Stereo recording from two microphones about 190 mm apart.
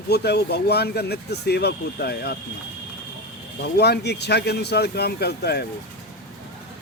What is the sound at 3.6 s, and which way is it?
Speech, 60° left (ahead or behind).